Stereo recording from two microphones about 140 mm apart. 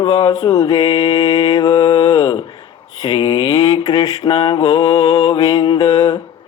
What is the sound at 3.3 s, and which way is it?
Mantra, 40° left (ahead or behind).